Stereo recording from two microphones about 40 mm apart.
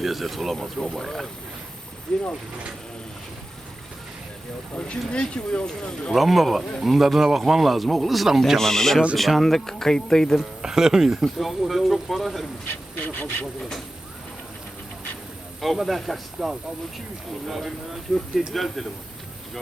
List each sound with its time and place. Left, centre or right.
0.0 s speech: centre
0.8 s speech: centre
2.1 s speech: centre
4.9 s speech: left
6.1 s speech: centre
8.5 s speech: centre
10.6 s speech: centre
13.0 s speech: left
15.6 s speech: centre